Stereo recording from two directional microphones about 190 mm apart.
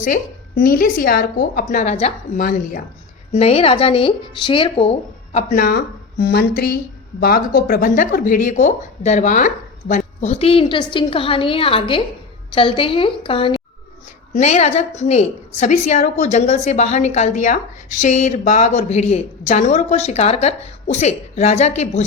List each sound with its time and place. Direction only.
0.0 s speech: 45° left (ahead or behind)
1.8 s a woman's voice: 35° left (ahead or behind)
3.3 s a woman's voice: 30° left (ahead or behind)